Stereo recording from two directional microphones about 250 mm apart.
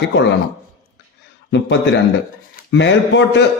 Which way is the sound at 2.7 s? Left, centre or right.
Left.